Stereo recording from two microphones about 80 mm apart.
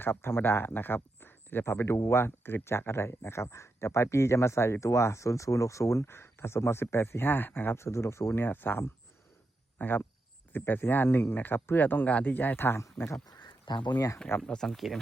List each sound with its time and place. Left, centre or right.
0.0 s speech: left
12.8 s speech: left
13.2 s a sound: left
14.4 s speech: centre